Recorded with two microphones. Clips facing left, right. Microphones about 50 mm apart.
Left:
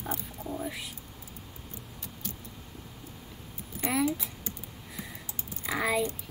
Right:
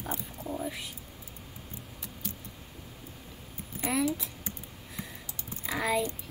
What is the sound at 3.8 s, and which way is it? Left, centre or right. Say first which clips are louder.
Speech: left 1 dB; centre.